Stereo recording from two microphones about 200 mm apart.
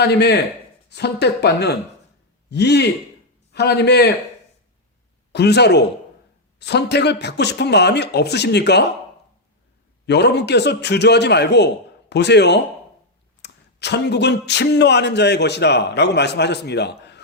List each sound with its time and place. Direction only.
0.0 s speech: 55° left (ahead or behind)
5.3 s speech: 55° left (ahead or behind)
10.1 s speech: 60° left (ahead or behind)